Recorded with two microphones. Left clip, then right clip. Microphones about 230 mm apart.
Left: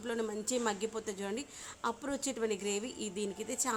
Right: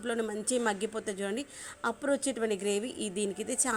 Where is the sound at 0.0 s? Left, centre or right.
Centre.